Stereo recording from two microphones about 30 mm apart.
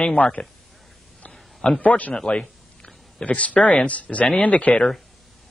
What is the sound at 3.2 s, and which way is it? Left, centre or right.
A man's voice, left.